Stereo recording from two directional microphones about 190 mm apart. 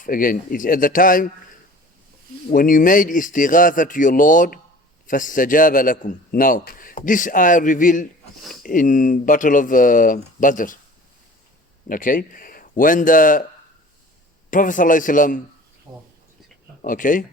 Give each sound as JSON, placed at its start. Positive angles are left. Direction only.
{"t": 0.0, "sound": "a man's voice", "side_deg": 45}
{"t": 2.5, "sound": "a man's voice", "side_deg": 45}
{"t": 11.9, "sound": "a man's voice", "side_deg": 45}
{"t": 14.5, "sound": "a man's voice", "side_deg": 45}
{"t": 16.8, "sound": "a man's voice", "side_deg": 45}